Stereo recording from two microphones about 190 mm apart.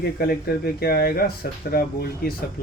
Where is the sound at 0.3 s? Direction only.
55° left (ahead or behind).